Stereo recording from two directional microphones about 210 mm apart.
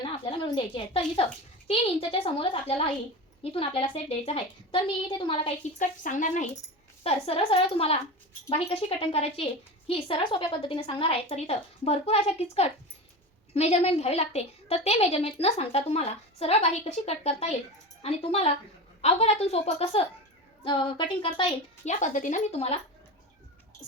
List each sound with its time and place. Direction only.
0.0 s a woman's voice: 25° left (ahead or behind)